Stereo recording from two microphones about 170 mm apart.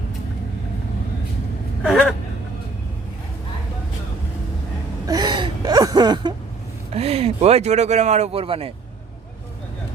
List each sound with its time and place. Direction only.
1.8 s gasp: 5° right (ahead or behind)
5.0 s gasp: 25° right (ahead or behind)
6.9 s speech: 35° right (ahead or behind)